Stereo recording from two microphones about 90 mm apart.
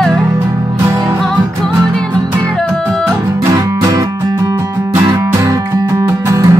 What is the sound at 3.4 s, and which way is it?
Music, 40° right (ahead or behind).